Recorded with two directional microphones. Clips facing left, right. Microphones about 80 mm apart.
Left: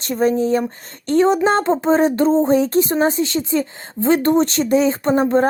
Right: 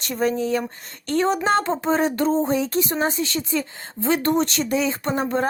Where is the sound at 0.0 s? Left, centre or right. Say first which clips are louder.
Left 5 dB; left.